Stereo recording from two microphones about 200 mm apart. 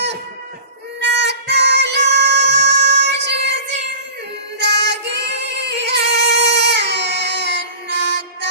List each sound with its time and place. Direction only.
0.9 s music: 60° right (ahead or behind)
4.6 s music: 60° right (ahead or behind)